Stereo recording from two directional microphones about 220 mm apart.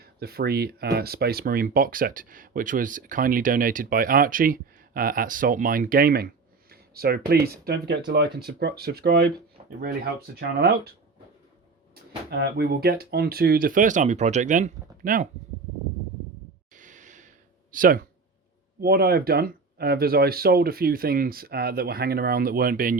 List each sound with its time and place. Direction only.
0.0 s speech: 45° right (ahead or behind)
12.3 s speech: 45° right (ahead or behind)
16.7 s gasp: 35° right (ahead or behind)
18.8 s speech: 45° right (ahead or behind)